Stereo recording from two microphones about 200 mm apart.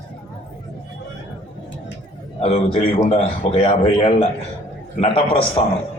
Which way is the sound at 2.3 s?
30° left (ahead or behind).